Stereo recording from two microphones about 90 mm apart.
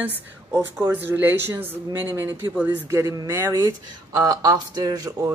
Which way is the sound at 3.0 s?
40° right (ahead or behind).